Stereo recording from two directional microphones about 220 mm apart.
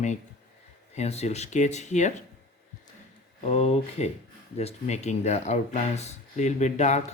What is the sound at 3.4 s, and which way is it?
Speech, 30° left (ahead or behind).